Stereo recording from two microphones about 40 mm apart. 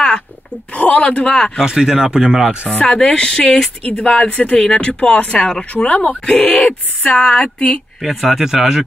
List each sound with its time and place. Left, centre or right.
0.7 s speech: left
1.6 s speech: centre
2.8 s speech: left
6.2 s speech: left
8.0 s speech: centre